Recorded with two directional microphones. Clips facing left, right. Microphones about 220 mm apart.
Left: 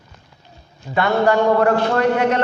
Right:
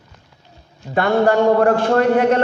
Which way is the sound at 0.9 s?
50° right (ahead or behind).